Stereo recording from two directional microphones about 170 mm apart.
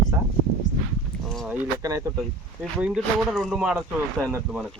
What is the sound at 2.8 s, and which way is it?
Speech, centre (ahead or behind).